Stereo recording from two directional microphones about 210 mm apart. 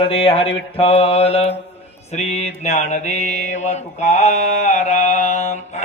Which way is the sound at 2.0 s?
30° left (ahead or behind).